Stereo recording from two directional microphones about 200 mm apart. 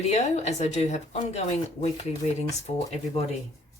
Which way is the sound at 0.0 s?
35° left (ahead or behind).